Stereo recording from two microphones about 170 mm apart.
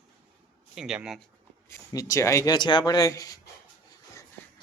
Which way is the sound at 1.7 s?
20° left (ahead or behind).